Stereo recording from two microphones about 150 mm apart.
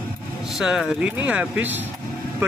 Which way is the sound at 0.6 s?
5° right (ahead or behind).